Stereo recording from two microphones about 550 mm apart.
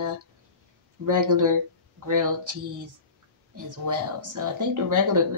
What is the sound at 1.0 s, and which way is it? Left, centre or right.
Speech, right.